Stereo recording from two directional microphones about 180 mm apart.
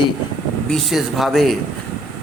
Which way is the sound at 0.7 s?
Centre (ahead or behind).